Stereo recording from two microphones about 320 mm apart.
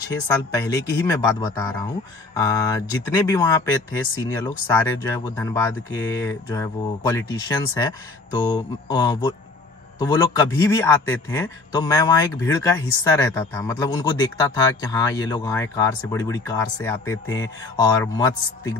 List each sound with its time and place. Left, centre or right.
0.5 s a man's voice: centre